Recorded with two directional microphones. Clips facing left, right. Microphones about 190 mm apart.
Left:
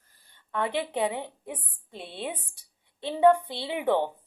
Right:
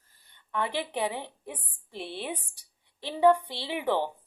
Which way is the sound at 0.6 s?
20° left (ahead or behind).